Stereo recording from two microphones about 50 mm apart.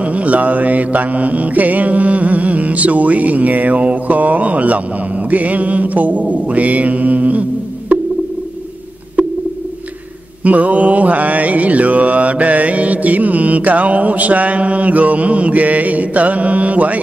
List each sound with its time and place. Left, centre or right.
0.0 s mantra: right
10.4 s mantra: right